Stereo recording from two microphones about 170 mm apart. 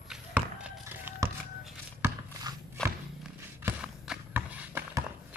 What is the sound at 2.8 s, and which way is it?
Walk, 5° left (ahead or behind).